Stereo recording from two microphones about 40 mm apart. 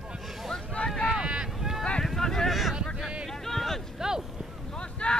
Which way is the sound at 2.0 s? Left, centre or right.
Centre.